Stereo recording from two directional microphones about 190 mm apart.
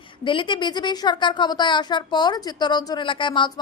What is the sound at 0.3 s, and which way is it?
A woman's voice, 25° left (ahead or behind).